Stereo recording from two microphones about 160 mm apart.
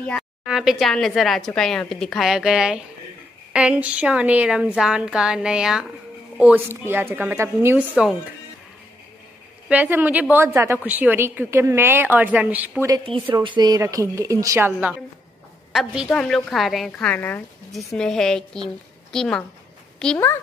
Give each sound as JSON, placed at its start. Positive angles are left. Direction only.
{"t": 0.5, "sound": "a woman's voice", "side_deg": 0}
{"t": 9.7, "sound": "a woman's voice", "side_deg": -10}
{"t": 13.0, "sound": "a woman's voice", "side_deg": -30}